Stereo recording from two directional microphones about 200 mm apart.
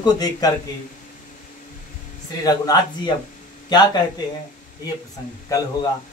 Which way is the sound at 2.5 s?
20° left (ahead or behind).